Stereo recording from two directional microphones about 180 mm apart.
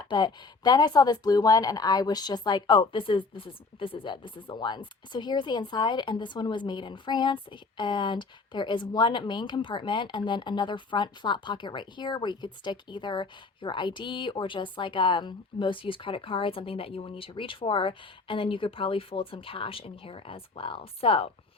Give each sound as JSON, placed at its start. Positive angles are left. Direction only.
{"t": 0.1, "sound": "speech", "side_deg": 25}